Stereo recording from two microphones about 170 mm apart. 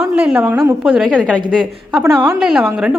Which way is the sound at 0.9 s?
Centre (ahead or behind).